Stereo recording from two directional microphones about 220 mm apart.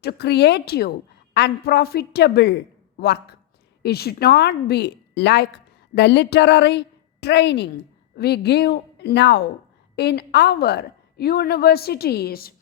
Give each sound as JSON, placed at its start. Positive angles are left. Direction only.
{"t": 0.0, "sound": "a woman's voice", "side_deg": 50}